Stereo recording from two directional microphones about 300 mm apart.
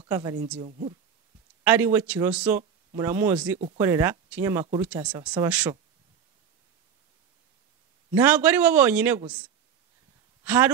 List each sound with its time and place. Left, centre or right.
0.0 s speech: centre
1.6 s a man's voice: centre
8.1 s a man's voice: centre
10.4 s speech: centre